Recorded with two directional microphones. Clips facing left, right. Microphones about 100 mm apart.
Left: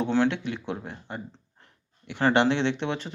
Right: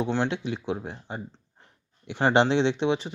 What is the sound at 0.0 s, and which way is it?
Speech, 15° right (ahead or behind).